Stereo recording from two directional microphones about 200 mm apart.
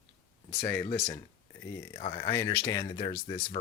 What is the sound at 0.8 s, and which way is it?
Speech, 25° left (ahead or behind).